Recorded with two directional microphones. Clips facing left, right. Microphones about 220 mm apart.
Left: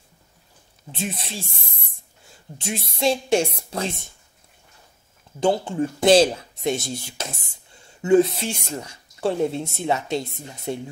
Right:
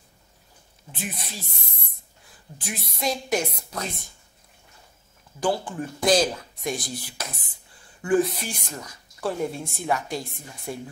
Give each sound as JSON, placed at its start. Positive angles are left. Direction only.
{"t": 0.9, "sound": "speech", "side_deg": 25}
{"t": 5.4, "sound": "speech", "side_deg": 25}